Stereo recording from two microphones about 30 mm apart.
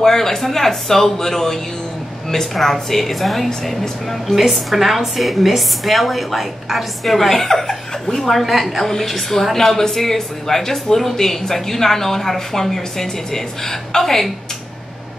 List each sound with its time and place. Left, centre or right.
0.0 s a woman's voice: centre
4.4 s a woman's voice: centre
7.2 s speech: centre
8.3 s a woman's voice: centre